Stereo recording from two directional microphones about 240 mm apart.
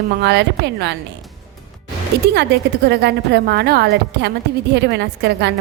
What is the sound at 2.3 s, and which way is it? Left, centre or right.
A woman's voice, right.